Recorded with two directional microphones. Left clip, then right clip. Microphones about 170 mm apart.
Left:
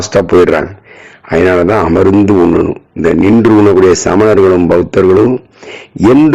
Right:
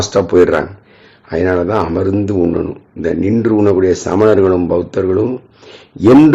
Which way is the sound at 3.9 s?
35° left (ahead or behind).